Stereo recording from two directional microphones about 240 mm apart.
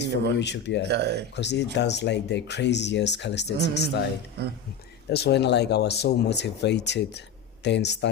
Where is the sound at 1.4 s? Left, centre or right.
Left.